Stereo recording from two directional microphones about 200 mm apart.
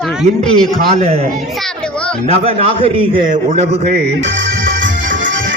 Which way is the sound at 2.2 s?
30° right (ahead or behind).